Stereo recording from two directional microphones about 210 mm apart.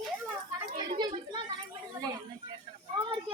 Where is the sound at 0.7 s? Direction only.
20° right (ahead or behind).